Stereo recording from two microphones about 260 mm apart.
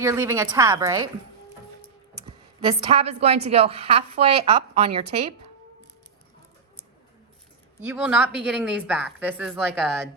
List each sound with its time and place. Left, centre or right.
0.0 s a woman's voice: centre
2.6 s a woman's voice: right
7.9 s a woman's voice: centre